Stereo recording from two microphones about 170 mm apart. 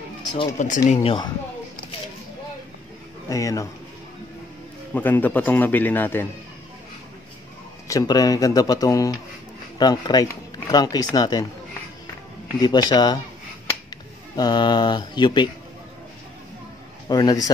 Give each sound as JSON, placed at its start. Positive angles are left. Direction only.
{"t": 0.2, "sound": "speech", "side_deg": 25}
{"t": 0.6, "sound": "speech", "side_deg": 45}
{"t": 1.0, "sound": "speech", "side_deg": 30}
{"t": 3.3, "sound": "speech", "side_deg": 20}
{"t": 4.9, "sound": "a man's voice", "side_deg": 10}
{"t": 7.9, "sound": "speech", "side_deg": 20}
{"t": 12.5, "sound": "speech", "side_deg": 25}
{"t": 14.3, "sound": "speech", "side_deg": 25}
{"t": 17.1, "sound": "speech", "side_deg": 20}